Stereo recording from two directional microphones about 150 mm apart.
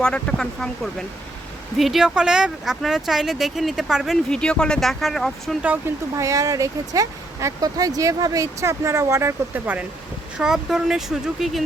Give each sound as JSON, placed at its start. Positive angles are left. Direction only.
{"t": 0.0, "sound": "speech", "side_deg": 5}
{"t": 5.6, "sound": "speech", "side_deg": -10}